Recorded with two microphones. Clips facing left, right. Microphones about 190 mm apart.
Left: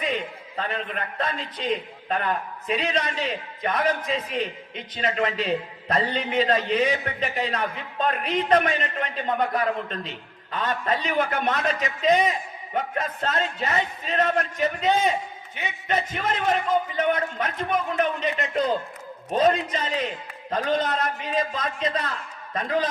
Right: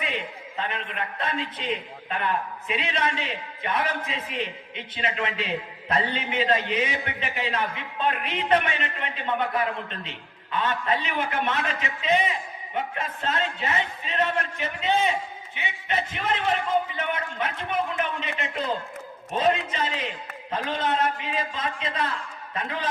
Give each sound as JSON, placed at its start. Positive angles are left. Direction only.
{"t": 0.0, "sound": "a man's voice", "side_deg": 40}